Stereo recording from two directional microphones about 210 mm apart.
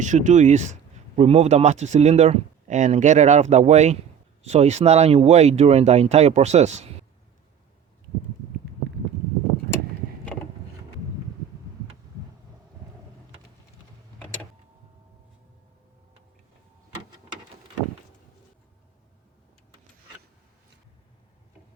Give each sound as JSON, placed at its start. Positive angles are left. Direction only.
{"t": 0.0, "sound": "speech", "side_deg": -35}